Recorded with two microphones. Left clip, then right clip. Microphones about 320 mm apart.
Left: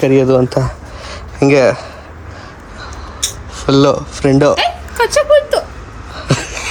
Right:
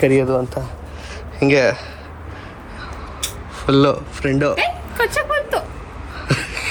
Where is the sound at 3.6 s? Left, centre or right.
Centre.